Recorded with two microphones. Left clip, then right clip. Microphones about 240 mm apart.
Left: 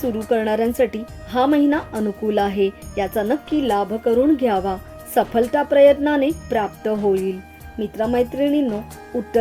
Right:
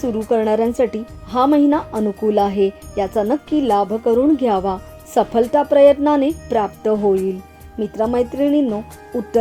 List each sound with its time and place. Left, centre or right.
0.3 s speech: centre